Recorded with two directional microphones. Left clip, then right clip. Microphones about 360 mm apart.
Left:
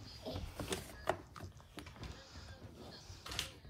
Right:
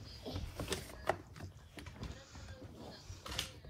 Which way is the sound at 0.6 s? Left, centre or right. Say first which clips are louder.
Right 4 dB; centre.